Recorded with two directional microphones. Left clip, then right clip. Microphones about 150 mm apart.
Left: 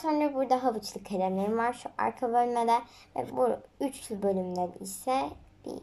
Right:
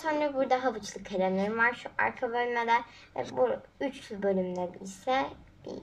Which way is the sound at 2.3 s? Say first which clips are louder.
Left 5 dB; 30° left (ahead or behind).